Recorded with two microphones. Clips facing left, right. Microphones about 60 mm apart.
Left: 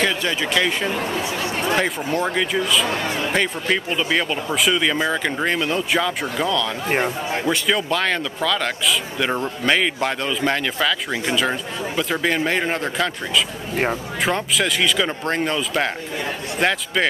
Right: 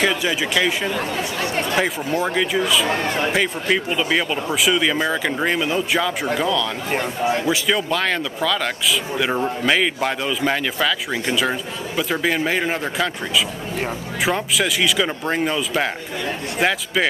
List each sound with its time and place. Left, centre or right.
0.0 s speech: centre
1.8 s speech: centre
2.9 s speech: right
3.3 s speech: centre